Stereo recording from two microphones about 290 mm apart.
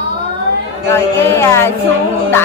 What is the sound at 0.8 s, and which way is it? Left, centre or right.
Speech, centre.